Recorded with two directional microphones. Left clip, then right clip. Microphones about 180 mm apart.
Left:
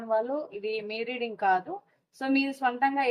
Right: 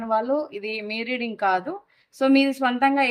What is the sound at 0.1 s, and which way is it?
A woman's voice, 50° right (ahead or behind).